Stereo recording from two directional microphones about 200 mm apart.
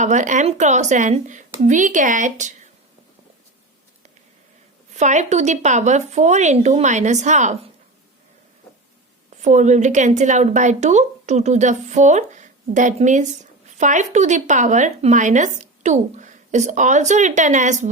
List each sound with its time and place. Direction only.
0.0 s speech: 35° right (ahead or behind)
4.9 s speech: 35° right (ahead or behind)
9.4 s speech: 35° right (ahead or behind)